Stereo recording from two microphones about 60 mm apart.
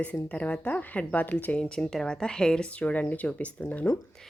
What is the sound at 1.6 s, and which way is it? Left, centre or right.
A woman's voice, centre.